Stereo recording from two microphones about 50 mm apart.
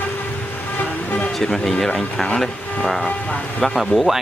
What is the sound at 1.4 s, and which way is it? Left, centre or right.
Speech, centre.